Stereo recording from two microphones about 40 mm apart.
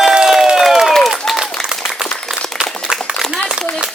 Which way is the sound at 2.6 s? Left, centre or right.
Centre.